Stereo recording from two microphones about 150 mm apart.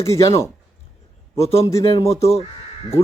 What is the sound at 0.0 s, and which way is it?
Speech, 20° left (ahead or behind).